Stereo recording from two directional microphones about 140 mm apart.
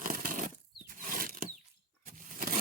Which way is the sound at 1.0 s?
90° right.